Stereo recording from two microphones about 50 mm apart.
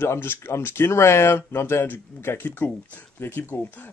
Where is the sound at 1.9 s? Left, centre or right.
Left.